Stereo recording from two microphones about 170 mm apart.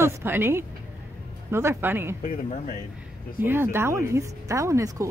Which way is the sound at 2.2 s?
50° left (ahead or behind).